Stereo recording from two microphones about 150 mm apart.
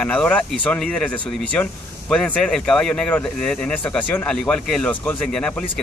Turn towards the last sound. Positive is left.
turn(degrees=5)  # may be behind; listen again after turning